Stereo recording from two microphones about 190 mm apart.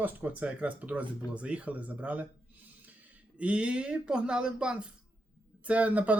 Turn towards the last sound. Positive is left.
turn(degrees=-10)  # may be behind; listen again after turning